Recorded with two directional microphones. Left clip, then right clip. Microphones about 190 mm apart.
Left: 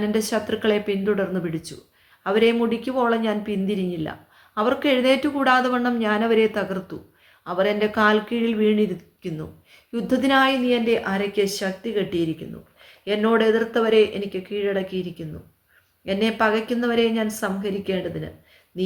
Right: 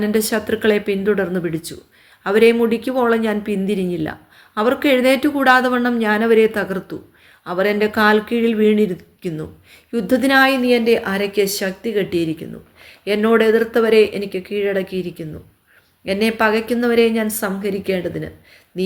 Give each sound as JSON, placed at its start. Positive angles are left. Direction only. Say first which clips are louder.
{"t": 0.0, "sound": "a woman's voice", "louder": "right 4 dB", "side_deg": -35}